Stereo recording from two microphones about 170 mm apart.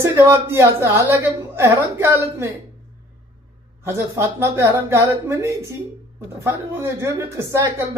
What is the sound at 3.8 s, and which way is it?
Speech, 15° right (ahead or behind).